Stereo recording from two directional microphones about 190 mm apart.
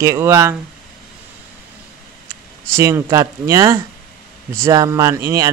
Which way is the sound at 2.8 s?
15° right (ahead or behind).